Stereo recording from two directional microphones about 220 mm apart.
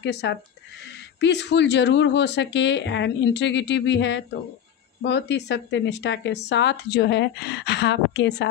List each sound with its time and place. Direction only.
0.0 s speech: 50° left (ahead or behind)